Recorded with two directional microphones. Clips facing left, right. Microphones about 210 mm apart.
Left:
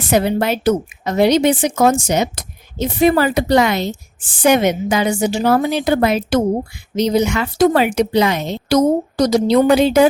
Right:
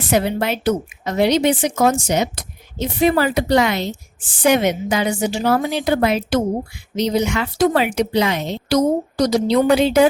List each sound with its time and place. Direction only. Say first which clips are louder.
0.1 s a woman's voice: left 3 dB; 45° left (ahead or behind)